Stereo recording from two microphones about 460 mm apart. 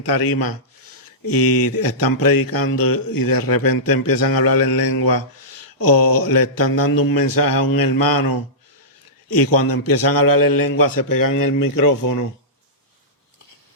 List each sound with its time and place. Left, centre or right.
0.0 s speech: left